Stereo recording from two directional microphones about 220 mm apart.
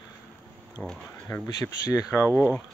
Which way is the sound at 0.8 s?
10° left (ahead or behind).